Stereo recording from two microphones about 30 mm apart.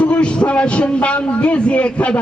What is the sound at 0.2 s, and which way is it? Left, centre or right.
A man's voice, left.